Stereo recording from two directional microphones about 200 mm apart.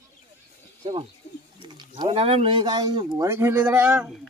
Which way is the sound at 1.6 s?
20° right (ahead or behind).